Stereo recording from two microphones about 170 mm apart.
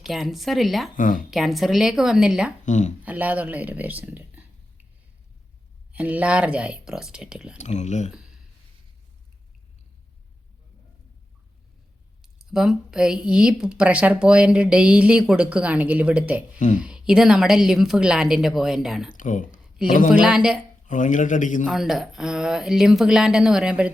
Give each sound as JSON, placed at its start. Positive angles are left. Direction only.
{"t": 0.1, "sound": "a woman's voice", "side_deg": 0}
{"t": 0.9, "sound": "a man's voice", "side_deg": 50}
{"t": 1.3, "sound": "a woman's voice", "side_deg": 0}
{"t": 2.6, "sound": "a man's voice", "side_deg": 45}
{"t": 3.0, "sound": "speech", "side_deg": -10}
{"t": 5.9, "sound": "speech", "side_deg": -10}
{"t": 7.6, "sound": "a man's voice", "side_deg": 40}
{"t": 8.1, "sound": "a sound", "side_deg": -5}
{"t": 12.2, "sound": "a woman's voice", "side_deg": 0}
{"t": 19.1, "sound": "a man's voice", "side_deg": 50}
{"t": 20.1, "sound": "a woman's voice", "side_deg": -5}
{"t": 20.8, "sound": "a man's voice", "side_deg": 50}
{"t": 21.7, "sound": "a woman's voice", "side_deg": 0}